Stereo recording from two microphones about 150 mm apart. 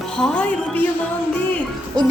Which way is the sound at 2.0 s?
30° right (ahead or behind).